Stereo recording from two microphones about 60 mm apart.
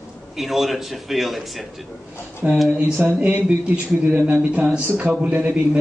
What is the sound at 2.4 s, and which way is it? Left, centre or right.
A man's voice, centre.